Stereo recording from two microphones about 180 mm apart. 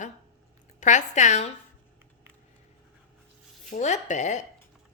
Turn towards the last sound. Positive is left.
turn(degrees=40)  # may be behind; listen again after turning